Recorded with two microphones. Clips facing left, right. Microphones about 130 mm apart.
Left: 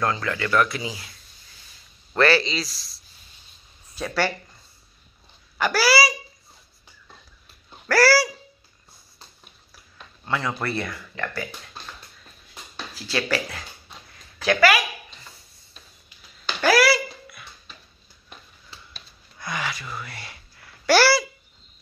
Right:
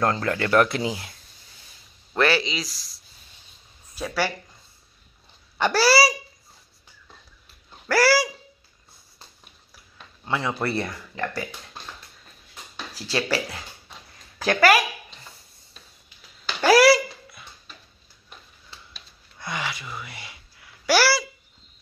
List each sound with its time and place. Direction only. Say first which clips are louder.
0.0 s a child's voice: right 2 dB; 40° right (ahead or behind)
0.7 s speech: right 5 dB; 60° right (ahead or behind)
2.1 s speech: left 2 dB; 15° right (ahead or behind)
3.9 s speech: left 1 dB; 5° right (ahead or behind)
5.6 s a child's voice: right 1 dB; 30° right (ahead or behind)
7.9 s speech: left 1 dB; 20° right (ahead or behind)
10.2 s speech: even; 20° right (ahead or behind)
10.6 s a child's voice: right 2 dB; 35° right (ahead or behind)
12.9 s speech: even; 35° right (ahead or behind)
14.4 s speech: right 1 dB; 40° right (ahead or behind)
16.6 s babbling: right 3 dB; 30° right (ahead or behind)
19.4 s a child's voice: left 1 dB; 25° right (ahead or behind)